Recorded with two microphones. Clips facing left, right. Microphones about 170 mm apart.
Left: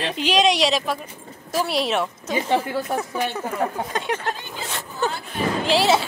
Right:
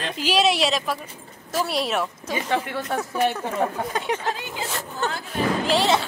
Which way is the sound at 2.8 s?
Centre (ahead or behind).